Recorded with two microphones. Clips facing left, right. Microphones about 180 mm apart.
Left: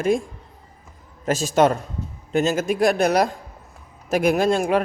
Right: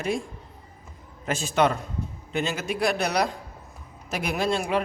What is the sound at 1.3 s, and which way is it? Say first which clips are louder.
A man's voice: left 5 dB; 40° left (ahead or behind).